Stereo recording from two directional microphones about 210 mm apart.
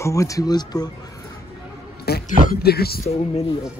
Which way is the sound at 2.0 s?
50° left (ahead or behind).